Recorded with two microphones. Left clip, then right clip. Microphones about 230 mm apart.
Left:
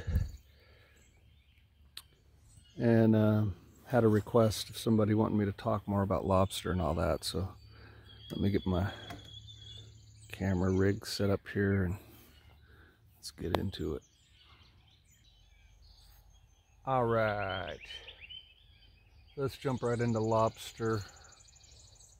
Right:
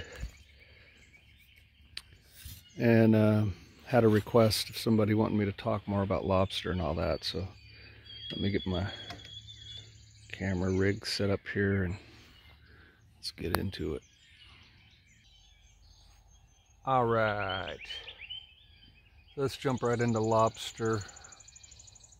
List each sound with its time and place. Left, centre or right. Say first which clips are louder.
2.0 s a sound: right 5 dB; centre
2.7 s speech: right 3 dB; centre
10.2 s speech: even; centre
12.7 s a sound: right 3 dB; centre
16.8 s speech: right 3 dB; centre
19.3 s speech: right 3 dB; right